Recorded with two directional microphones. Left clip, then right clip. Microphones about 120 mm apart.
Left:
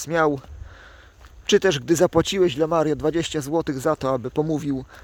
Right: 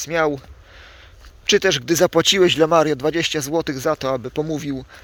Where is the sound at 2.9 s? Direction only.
30° left (ahead or behind); by 4.8 s 50° left (ahead or behind).